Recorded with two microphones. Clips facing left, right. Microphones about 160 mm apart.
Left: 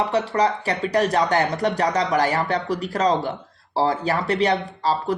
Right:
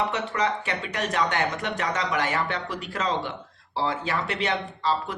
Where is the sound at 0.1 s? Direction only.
35° left (ahead or behind).